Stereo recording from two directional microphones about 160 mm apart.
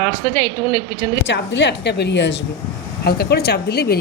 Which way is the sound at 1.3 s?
90° left.